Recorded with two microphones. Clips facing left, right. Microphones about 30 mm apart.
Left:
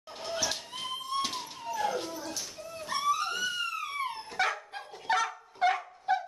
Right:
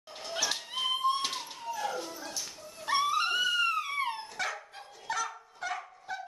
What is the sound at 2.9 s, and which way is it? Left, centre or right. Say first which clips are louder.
Dog: right 2 dB; right.